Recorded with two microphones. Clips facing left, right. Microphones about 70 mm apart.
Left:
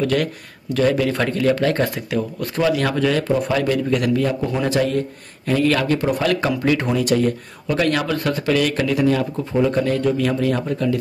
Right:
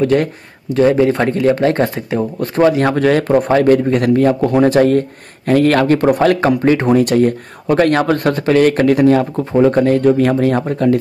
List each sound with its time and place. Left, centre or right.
0.0 s speech: right
6.9 s speech: right